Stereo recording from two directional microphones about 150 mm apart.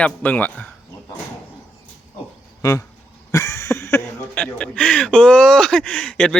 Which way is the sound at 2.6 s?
20° left (ahead or behind).